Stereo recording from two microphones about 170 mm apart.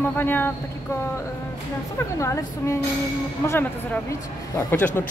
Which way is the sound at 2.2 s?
20° left (ahead or behind).